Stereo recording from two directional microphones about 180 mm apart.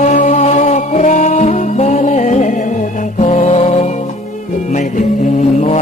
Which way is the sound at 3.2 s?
40° left (ahead or behind).